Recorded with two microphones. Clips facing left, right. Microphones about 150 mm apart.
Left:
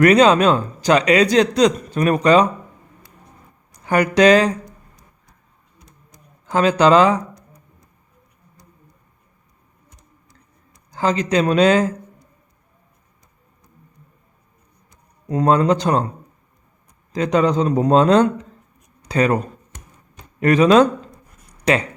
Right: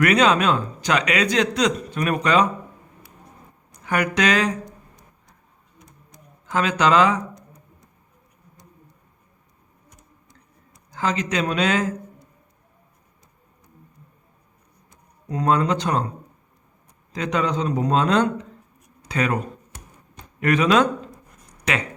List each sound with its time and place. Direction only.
0.0 s speech: 35° left (ahead or behind)
3.8 s speech: 35° left (ahead or behind)
6.5 s speech: 35° left (ahead or behind)
10.9 s speech: 35° left (ahead or behind)
15.3 s speech: 40° left (ahead or behind)
17.1 s a man's voice: 35° left (ahead or behind)
20.4 s speech: 35° left (ahead or behind)